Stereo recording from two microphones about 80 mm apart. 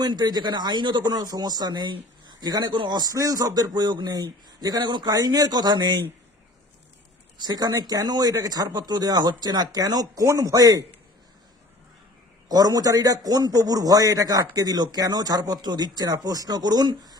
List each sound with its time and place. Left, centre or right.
0.0 s speech: right
7.3 s speech: right
12.5 s speech: right